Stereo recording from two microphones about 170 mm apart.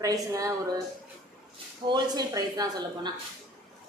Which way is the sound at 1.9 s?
25° right (ahead or behind).